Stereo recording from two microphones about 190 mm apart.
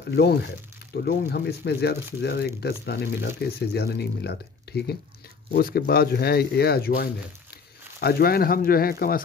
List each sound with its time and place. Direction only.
0.1 s speech: 60° left (ahead or behind)
4.7 s a sound: 60° left (ahead or behind)
5.5 s speech: 50° left (ahead or behind)